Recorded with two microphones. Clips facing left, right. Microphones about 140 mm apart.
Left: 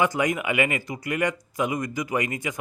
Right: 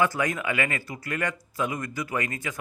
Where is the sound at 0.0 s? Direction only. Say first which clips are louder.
Left 2 dB; 15° left (ahead or behind).